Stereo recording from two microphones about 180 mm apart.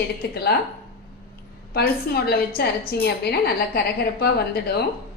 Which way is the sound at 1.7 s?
60° left (ahead or behind).